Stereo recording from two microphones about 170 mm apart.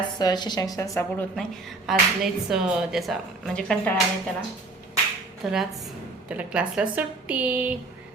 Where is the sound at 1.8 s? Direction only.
Centre (ahead or behind).